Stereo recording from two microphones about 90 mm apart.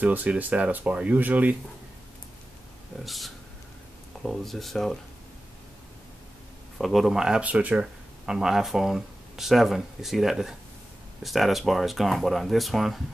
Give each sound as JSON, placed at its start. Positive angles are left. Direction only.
{"t": 0.0, "sound": "speech", "side_deg": -15}
{"t": 3.1, "sound": "speech", "side_deg": 0}
{"t": 6.8, "sound": "speech", "side_deg": 0}